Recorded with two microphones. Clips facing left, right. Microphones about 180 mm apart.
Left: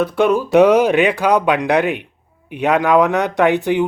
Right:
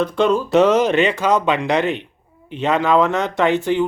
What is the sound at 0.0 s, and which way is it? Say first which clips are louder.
Speech: left 2 dB; 10° left (ahead or behind).